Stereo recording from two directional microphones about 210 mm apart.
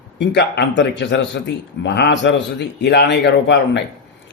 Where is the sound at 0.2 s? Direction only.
55° left (ahead or behind).